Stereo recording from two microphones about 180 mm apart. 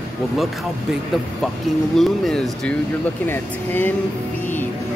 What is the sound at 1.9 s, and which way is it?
Speech, centre (ahead or behind).